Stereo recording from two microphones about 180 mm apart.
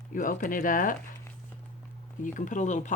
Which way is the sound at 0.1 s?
50° left (ahead or behind).